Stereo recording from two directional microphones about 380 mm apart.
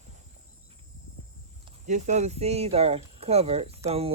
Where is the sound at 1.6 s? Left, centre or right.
Centre.